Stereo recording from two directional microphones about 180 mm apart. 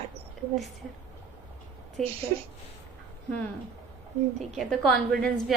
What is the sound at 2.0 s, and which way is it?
Speech, centre (ahead or behind).